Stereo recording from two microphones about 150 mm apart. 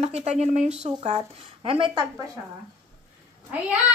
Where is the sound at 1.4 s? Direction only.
35° right (ahead or behind).